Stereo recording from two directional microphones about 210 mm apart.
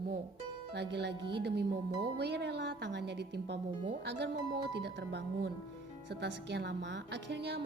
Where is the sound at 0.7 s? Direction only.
55° right (ahead or behind).